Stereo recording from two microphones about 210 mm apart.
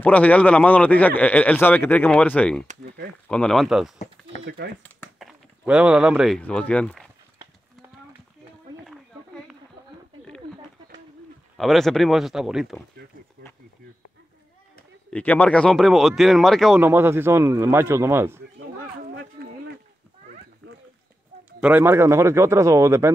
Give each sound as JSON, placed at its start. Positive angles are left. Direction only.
{"t": 0.0, "sound": "a man's voice", "side_deg": 5}
{"t": 4.8, "sound": "crumpling", "side_deg": 5}
{"t": 5.7, "sound": "speech", "side_deg": -5}
{"t": 8.8, "sound": "a sound", "side_deg": 0}
{"t": 11.5, "sound": "speech", "side_deg": 0}
{"t": 15.0, "sound": "speech", "side_deg": 5}
{"t": 16.8, "sound": "speech", "side_deg": -10}
{"t": 19.4, "sound": "a sound", "side_deg": -50}
{"t": 21.5, "sound": "speech", "side_deg": -10}